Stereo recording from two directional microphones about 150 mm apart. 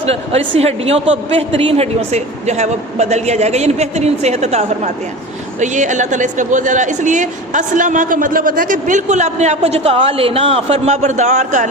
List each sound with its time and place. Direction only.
0.0 s speech: 40° right (ahead or behind)